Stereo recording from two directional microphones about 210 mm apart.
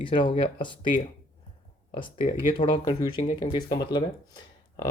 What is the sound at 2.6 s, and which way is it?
Speech, 25° left (ahead or behind).